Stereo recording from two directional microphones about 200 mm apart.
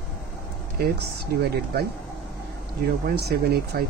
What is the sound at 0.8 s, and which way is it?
Speech, 55° right (ahead or behind).